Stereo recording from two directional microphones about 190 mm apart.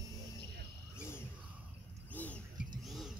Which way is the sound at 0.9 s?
15° left (ahead or behind).